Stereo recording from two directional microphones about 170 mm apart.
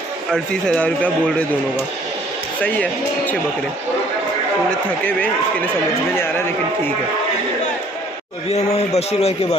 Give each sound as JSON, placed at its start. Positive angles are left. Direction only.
{"t": 0.3, "sound": "a man's voice", "side_deg": 5}
{"t": 2.6, "sound": "a man's voice", "side_deg": 10}
{"t": 4.6, "sound": "a man's voice", "side_deg": 10}
{"t": 8.5, "sound": "a man's voice", "side_deg": 40}